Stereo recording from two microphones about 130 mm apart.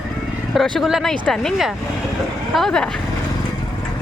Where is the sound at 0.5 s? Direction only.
Centre (ahead or behind).